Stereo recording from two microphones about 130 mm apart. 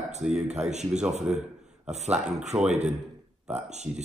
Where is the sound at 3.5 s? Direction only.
60° right (ahead or behind).